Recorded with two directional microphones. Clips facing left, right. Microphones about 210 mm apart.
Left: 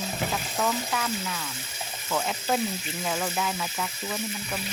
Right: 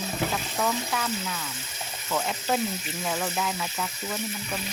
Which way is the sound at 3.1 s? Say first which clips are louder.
Even; centre (ahead or behind).